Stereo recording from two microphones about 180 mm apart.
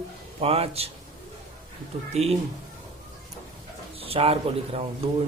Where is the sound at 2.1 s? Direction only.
35° right (ahead or behind).